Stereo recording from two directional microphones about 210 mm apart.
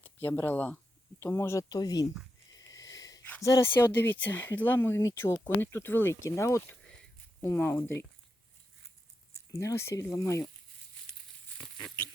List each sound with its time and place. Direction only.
0.0 s speech: 10° left (ahead or behind)
9.5 s speech: 15° left (ahead or behind)
11.5 s patter: centre (ahead or behind)